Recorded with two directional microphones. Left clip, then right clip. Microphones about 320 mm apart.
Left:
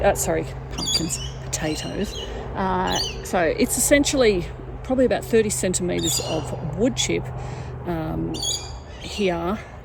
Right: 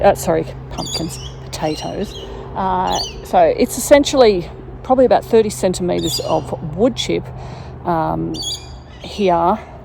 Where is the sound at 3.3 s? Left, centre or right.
Centre.